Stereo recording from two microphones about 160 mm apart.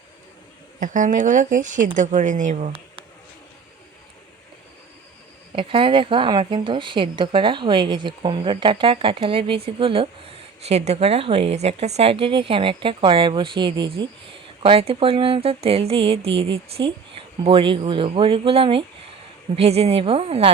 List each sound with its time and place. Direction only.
0.8 s speech: 55° right (ahead or behind)
5.5 s a woman's voice: 35° right (ahead or behind)